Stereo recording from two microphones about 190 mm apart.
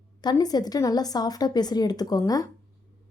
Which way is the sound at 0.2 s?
20° left (ahead or behind).